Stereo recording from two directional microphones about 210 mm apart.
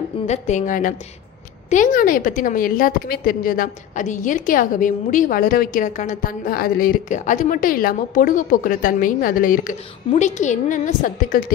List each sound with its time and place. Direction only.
0.3 s a woman's voice: 35° left (ahead or behind)